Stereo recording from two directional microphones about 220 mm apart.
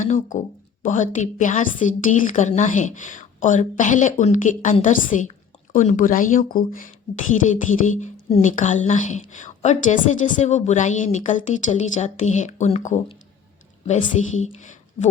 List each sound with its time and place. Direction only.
0.0 s a woman's voice: 35° left (ahead or behind)